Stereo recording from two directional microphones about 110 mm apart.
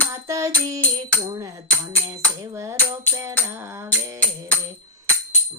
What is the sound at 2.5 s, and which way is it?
Music, 25° right (ahead or behind).